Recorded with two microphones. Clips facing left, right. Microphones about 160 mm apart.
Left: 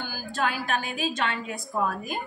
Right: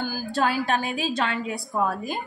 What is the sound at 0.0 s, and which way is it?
A woman's voice, 40° right (ahead or behind).